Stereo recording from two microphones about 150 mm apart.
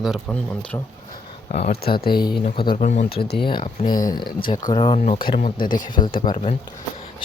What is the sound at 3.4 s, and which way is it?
Speech, 30° left (ahead or behind).